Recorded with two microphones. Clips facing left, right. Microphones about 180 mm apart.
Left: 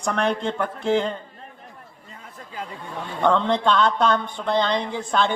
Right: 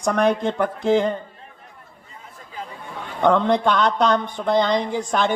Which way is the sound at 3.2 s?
15° right (ahead or behind).